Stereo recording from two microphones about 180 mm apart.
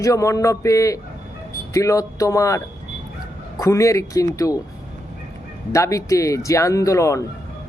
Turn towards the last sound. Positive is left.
turn(degrees=15)  # may be behind; listen again after turning